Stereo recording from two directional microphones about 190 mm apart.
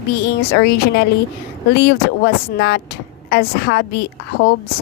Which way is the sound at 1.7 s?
60° left (ahead or behind).